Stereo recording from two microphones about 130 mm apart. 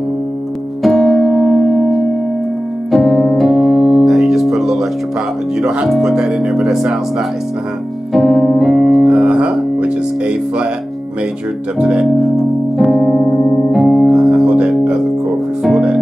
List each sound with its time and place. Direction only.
0.8 s music: centre (ahead or behind)
2.9 s piano: centre (ahead or behind)
5.6 s speech: 5° right (ahead or behind)
8.1 s piano: centre (ahead or behind)
11.8 s music: 5° right (ahead or behind)